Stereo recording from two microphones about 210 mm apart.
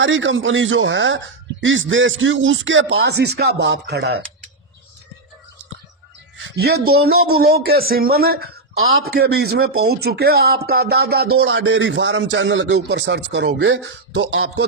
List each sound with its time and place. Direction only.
0.0 s a man's voice: 65° right (ahead or behind)
6.3 s a man's voice: 55° right (ahead or behind)